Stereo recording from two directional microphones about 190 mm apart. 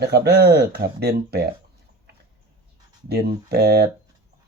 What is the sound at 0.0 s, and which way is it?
Speech, 60° right (ahead or behind).